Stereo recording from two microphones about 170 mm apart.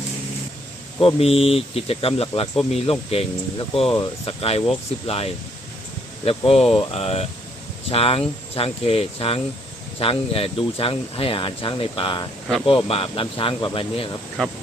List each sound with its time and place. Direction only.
0.9 s speech: 35° left (ahead or behind)
14.4 s speech: 5° left (ahead or behind)